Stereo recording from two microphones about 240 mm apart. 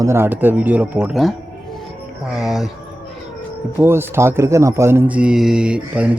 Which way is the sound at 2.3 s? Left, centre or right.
Centre.